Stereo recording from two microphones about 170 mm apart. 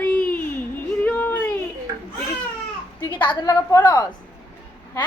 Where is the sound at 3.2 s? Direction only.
20° left (ahead or behind).